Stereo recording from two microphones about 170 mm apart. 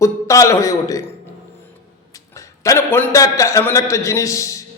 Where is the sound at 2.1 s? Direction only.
20° left (ahead or behind).